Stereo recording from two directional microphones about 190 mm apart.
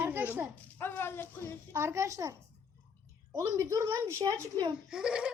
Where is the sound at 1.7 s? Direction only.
15° right (ahead or behind).